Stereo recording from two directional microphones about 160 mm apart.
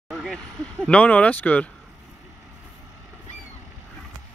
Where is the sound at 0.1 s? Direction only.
Centre (ahead or behind).